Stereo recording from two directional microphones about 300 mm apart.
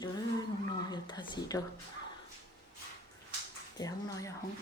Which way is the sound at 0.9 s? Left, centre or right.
Centre.